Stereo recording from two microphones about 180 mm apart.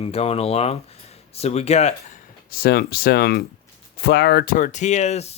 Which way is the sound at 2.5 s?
60° left (ahead or behind).